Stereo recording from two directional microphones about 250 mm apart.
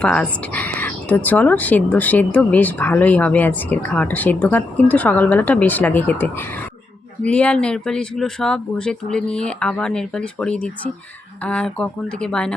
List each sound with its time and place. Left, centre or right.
0.0 s speech: centre